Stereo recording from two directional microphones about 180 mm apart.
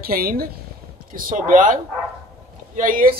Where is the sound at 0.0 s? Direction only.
55° right (ahead or behind).